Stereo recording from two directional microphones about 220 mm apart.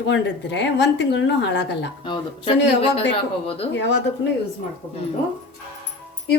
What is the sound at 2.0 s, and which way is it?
Speech, 25° left (ahead or behind).